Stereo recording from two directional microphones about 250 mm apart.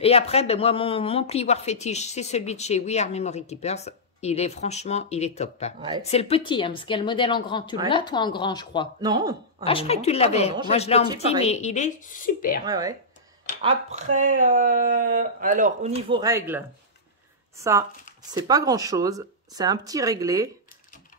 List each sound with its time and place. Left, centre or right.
0.0 s speech: left
5.8 s speech: centre
6.0 s speech: left
9.0 s speech: centre
9.7 s speech: left
12.6 s speech: centre
13.6 s speech: right
16.1 s speech: centre
18.3 s speech: centre